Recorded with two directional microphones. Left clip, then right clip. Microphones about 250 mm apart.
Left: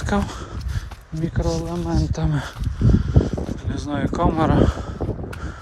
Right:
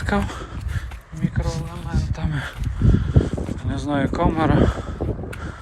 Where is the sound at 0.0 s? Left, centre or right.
Centre.